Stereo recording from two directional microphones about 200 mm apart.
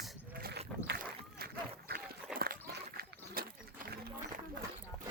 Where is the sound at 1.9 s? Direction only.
50° right (ahead or behind).